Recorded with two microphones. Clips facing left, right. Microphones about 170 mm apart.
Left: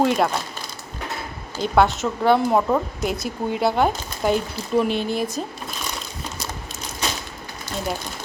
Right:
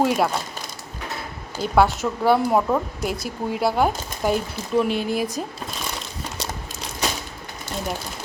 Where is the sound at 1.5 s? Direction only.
10° right (ahead or behind).